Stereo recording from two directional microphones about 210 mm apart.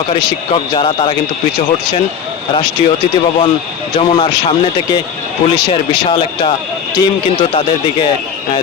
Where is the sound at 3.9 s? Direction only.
25° left (ahead or behind).